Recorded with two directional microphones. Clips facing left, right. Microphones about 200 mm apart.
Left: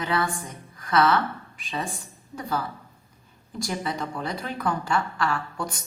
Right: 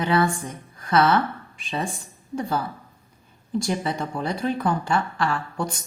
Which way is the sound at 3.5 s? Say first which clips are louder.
Right 5 dB; 25° right (ahead or behind).